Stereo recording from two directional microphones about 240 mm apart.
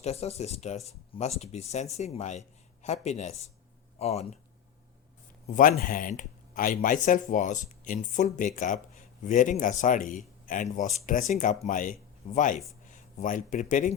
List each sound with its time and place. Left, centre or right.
0.0 s speech: left
5.5 s a man's voice: left